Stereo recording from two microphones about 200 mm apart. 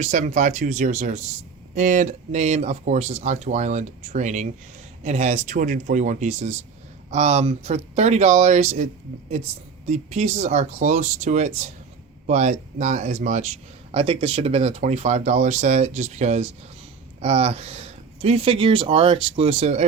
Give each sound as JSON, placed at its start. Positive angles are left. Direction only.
{"t": 0.0, "sound": "a man's voice", "side_deg": -35}